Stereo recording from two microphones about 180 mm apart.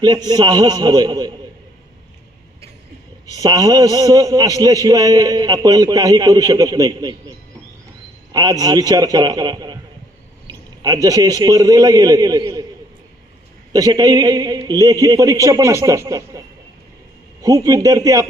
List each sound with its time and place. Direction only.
0.0 s a man's voice: 25° right (ahead or behind)
3.2 s a man's voice: 20° right (ahead or behind)
13.7 s a man's voice: 20° right (ahead or behind)
17.4 s a man's voice: 20° right (ahead or behind)